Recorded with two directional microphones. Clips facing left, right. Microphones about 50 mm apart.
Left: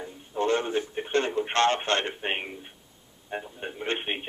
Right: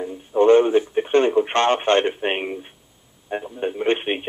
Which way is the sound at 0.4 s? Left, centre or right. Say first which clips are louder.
Right 12 dB; right.